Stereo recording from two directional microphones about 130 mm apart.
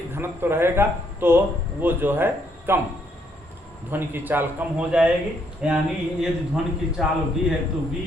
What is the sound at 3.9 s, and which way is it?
A man's voice, 15° right (ahead or behind).